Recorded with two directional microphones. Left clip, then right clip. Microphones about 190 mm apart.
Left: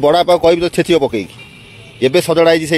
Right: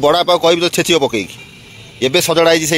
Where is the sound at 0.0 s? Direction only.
20° left (ahead or behind).